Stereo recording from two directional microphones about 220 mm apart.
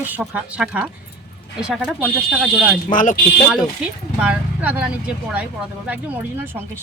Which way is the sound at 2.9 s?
35° left (ahead or behind).